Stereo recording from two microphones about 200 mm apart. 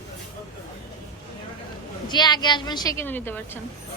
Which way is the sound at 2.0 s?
20° left (ahead or behind).